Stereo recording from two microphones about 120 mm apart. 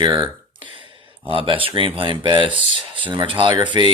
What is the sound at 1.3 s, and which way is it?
Speech, 45° right (ahead or behind).